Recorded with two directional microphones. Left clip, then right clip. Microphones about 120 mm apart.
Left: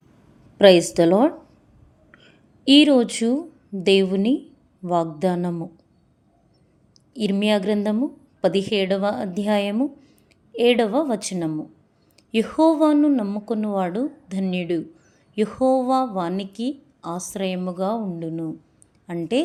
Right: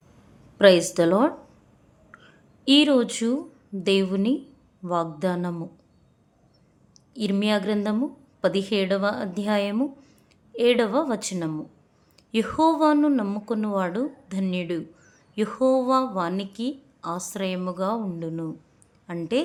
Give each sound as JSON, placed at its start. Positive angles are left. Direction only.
{"t": 0.6, "sound": "a woman's voice", "side_deg": 25}
{"t": 7.1, "sound": "a woman's voice", "side_deg": 20}
{"t": 9.7, "sound": "a sound", "side_deg": 10}
{"t": 10.5, "sound": "a woman's voice", "side_deg": 25}
{"t": 15.0, "sound": "a sound", "side_deg": 15}
{"t": 16.4, "sound": "a woman's voice", "side_deg": 20}